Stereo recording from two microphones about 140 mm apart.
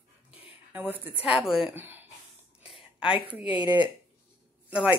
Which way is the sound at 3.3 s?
10° right (ahead or behind).